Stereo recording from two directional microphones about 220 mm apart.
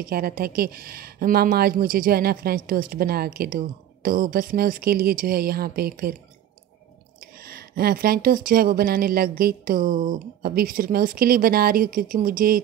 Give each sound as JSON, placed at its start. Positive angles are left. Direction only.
{"t": 0.0, "sound": "speech", "side_deg": -40}
{"t": 7.2, "sound": "speech", "side_deg": -45}